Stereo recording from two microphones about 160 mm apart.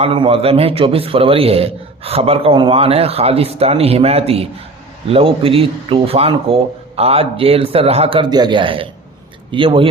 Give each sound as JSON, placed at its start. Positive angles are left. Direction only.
{"t": 0.0, "sound": "a man's voice", "side_deg": -35}